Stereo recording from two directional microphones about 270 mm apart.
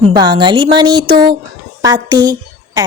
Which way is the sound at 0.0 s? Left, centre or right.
Centre.